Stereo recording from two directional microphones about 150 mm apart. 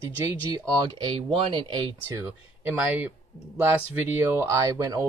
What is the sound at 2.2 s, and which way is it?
Speech, 10° right (ahead or behind).